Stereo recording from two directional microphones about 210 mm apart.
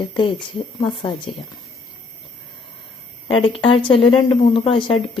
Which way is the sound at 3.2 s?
25° left (ahead or behind).